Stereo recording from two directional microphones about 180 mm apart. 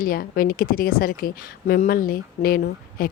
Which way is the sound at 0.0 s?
55° left (ahead or behind).